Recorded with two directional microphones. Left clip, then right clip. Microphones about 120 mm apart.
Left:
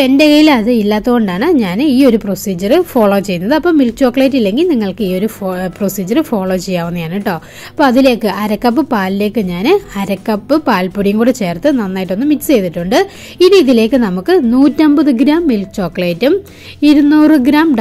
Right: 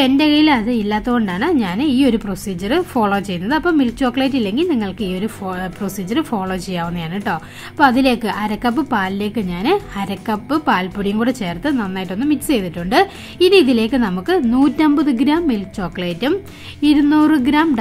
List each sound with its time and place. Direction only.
0.0 s a woman's voice: 35° left (ahead or behind)